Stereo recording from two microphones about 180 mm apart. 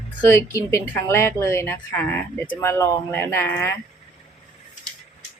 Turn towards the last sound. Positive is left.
turn(degrees=10)  # may be behind; listen again after turning